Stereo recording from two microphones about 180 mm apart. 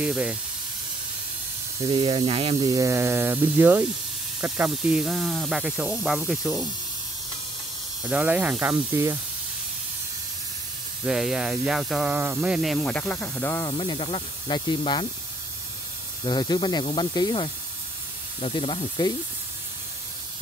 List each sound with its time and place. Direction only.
0.0 s speech: 5° right (ahead or behind)
1.9 s speech: 30° right (ahead or behind)
2.7 s speech: 15° right (ahead or behind); by 6.7 s centre (ahead or behind)
8.0 s speech: 5° right (ahead or behind)
11.1 s speech: centre (ahead or behind); by 13.7 s 15° left (ahead or behind)
13.7 s speech: 25° left (ahead or behind)
16.3 s speech: 25° left (ahead or behind)